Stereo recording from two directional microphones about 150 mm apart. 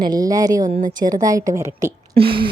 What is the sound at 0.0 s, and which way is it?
A woman's voice, 25° right (ahead or behind).